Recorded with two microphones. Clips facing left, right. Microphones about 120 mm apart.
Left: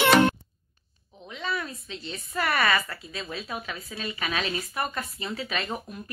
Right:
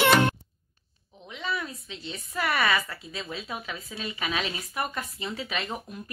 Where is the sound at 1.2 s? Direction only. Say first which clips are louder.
Left 1 dB; 10° right (ahead or behind).